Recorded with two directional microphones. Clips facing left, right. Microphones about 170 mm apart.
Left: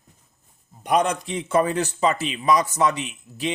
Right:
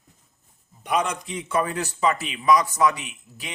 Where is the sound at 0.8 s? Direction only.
35° left (ahead or behind).